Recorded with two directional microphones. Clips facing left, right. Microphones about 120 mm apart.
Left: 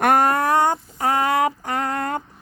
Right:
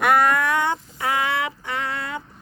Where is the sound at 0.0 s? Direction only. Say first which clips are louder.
Left 1 dB; 45° left (ahead or behind).